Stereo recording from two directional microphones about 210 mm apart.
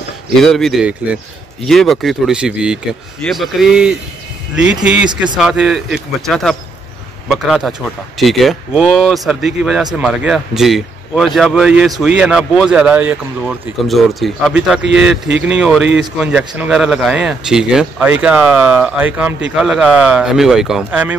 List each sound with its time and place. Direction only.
0.3 s speech: centre (ahead or behind)
5.1 s a man's voice: 20° right (ahead or behind)
5.4 s speech: centre (ahead or behind)